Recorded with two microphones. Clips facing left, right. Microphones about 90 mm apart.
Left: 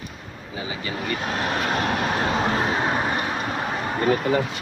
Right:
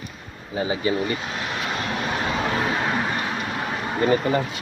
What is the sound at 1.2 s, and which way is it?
Speech, 45° left (ahead or behind).